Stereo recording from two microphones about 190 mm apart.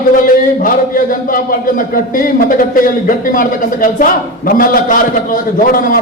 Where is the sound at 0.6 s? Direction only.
45° left (ahead or behind).